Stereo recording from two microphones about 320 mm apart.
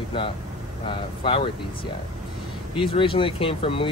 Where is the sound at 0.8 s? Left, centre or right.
Centre.